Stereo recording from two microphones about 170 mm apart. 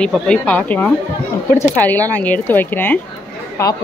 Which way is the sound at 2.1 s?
10° left (ahead or behind).